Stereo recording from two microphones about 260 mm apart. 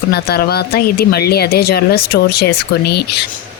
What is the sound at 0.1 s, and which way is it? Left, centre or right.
Speech, left.